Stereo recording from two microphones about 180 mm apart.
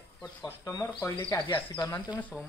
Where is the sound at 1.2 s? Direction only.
25° left (ahead or behind).